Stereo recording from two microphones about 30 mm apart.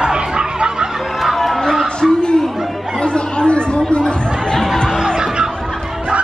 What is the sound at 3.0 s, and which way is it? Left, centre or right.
Chatter, left.